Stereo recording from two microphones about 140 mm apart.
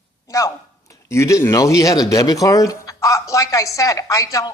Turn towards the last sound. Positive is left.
turn(degrees=25)  # may be behind; listen again after turning